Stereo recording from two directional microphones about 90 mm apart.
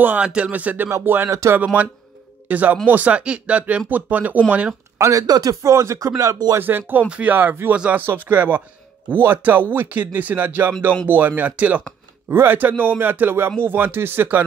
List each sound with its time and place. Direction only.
0.0 s speech: 20° right (ahead or behind)
0.8 s speech: 30° right (ahead or behind)
2.4 s speech: 20° right (ahead or behind)
4.9 s speech: 40° right (ahead or behind)
6.5 s speech: 25° right (ahead or behind)